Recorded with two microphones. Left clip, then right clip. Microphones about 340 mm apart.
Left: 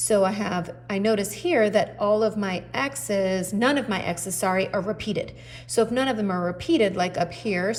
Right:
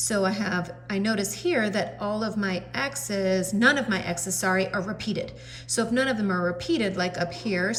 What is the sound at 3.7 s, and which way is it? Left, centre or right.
Speech, centre.